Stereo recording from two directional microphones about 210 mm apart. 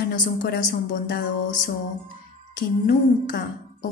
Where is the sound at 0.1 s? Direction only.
40° left (ahead or behind).